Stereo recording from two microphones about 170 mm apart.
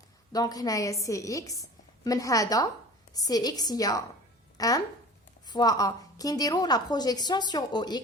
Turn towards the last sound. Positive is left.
turn(degrees=25)  # may be behind; listen again after turning